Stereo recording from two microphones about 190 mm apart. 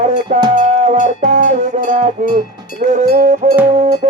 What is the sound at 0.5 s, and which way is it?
Cowbell, 40° right (ahead or behind).